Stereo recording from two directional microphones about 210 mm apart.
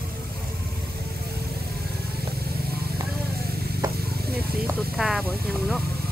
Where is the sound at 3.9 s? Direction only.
45° right (ahead or behind).